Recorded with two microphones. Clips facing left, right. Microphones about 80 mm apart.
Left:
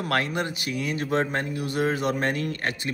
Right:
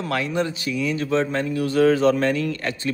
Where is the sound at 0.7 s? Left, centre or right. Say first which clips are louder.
Right 4 dB; left.